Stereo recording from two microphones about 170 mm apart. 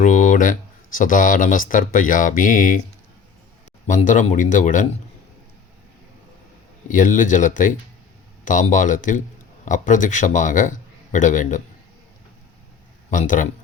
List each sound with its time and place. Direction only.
0.0 s speech: 50° left (ahead or behind)
3.8 s a man's voice: 45° left (ahead or behind)
6.9 s a man's voice: 50° left (ahead or behind)
13.1 s a man's voice: 50° left (ahead or behind)